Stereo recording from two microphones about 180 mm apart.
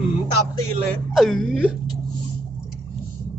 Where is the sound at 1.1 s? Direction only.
Centre (ahead or behind).